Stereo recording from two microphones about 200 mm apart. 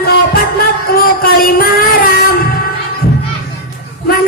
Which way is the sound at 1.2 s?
45° left (ahead or behind).